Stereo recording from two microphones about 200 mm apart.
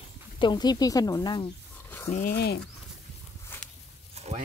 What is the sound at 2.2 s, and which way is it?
Speech, 50° left (ahead or behind).